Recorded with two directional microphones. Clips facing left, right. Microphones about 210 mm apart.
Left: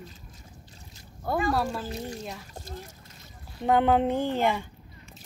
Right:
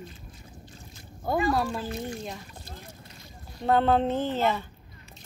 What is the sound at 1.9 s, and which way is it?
Speech, 40° left (ahead or behind).